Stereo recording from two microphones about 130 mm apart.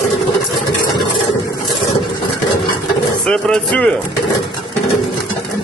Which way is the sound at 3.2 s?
10° left (ahead or behind).